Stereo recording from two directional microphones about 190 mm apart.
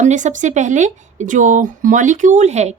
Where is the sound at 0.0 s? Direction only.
40° right (ahead or behind).